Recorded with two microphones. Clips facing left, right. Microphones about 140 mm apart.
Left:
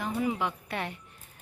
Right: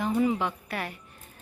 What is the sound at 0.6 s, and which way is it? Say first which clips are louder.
Speech: even; 25° left (ahead or behind).